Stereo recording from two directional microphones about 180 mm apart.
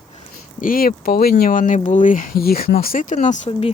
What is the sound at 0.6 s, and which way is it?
Speech, 55° left (ahead or behind).